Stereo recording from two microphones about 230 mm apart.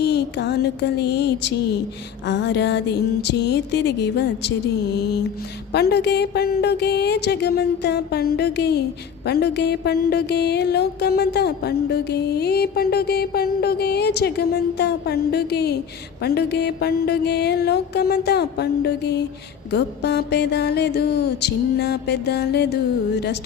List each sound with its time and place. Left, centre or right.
0.0 s music: left